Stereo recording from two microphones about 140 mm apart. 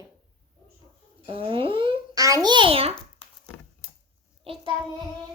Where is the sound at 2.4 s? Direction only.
35° right (ahead or behind).